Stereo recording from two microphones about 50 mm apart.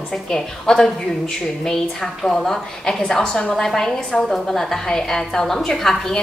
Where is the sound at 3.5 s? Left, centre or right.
Centre.